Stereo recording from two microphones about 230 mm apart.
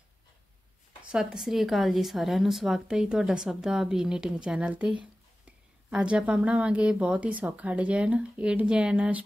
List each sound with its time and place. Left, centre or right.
1.1 s speech: centre